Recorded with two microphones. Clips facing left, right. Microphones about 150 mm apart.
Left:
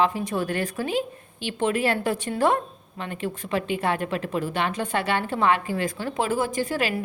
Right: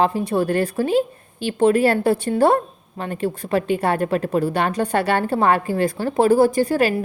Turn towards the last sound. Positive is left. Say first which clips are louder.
# right 8 dB
turn(degrees=-40)  # may be behind; listen again after turning